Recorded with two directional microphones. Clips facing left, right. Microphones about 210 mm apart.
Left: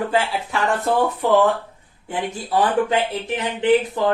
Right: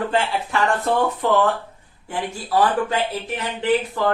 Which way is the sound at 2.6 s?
20° left (ahead or behind).